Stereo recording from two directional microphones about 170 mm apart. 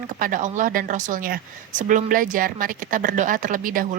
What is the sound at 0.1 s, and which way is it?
Speech, 50° right (ahead or behind).